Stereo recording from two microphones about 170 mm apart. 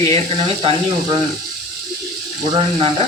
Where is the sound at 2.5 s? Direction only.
30° right (ahead or behind).